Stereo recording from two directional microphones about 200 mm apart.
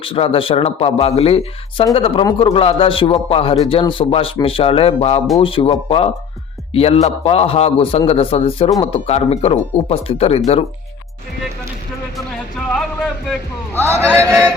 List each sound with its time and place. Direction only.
0.0 s a man's voice: 30° left (ahead or behind)
13.7 s a man's voice: 15° right (ahead or behind)